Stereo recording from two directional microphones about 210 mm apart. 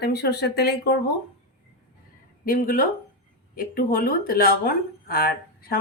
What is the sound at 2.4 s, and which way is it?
Speech, 40° left (ahead or behind).